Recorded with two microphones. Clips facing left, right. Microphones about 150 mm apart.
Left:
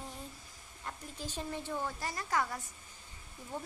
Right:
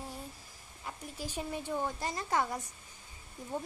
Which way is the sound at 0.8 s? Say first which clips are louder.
Right 2 dB; 10° right (ahead or behind).